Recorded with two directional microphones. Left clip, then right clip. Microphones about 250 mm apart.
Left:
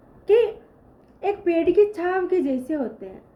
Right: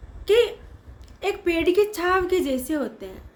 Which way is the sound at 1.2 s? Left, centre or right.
Centre.